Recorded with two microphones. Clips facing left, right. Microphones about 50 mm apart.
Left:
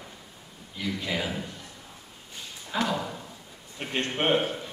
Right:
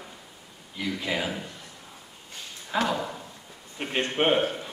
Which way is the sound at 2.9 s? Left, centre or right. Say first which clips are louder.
Right 1 dB; centre.